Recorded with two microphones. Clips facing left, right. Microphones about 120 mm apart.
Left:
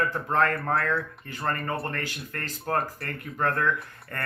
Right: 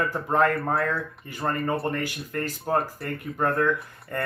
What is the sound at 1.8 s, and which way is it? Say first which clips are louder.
Speech: right 5 dB; 15° right (ahead or behind).